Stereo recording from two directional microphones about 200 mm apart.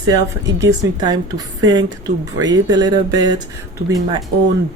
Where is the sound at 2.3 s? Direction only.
20° right (ahead or behind).